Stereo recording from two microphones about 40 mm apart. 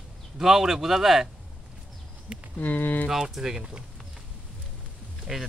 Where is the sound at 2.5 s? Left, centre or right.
Left.